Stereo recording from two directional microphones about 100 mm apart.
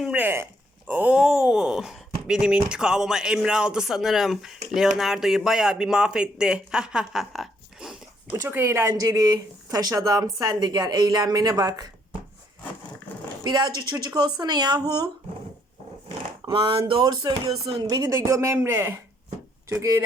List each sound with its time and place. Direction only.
0.0 s speech: 15° right (ahead or behind)
8.3 s speech: 25° right (ahead or behind)
8.9 s speech: 40° right (ahead or behind)
13.4 s speech: 45° right (ahead or behind)
16.0 s a sound: 60° right (ahead or behind)
16.9 s speech: 45° right (ahead or behind); by 18.9 s 20° right (ahead or behind)
19.7 s speech: 35° right (ahead or behind)